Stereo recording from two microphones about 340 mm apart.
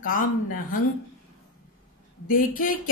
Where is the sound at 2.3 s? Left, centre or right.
Left.